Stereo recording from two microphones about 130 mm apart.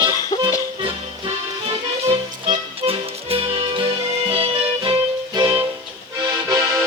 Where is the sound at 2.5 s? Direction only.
45° right (ahead or behind).